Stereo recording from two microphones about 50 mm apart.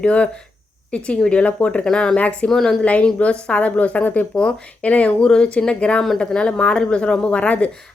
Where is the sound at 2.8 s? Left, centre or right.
Left.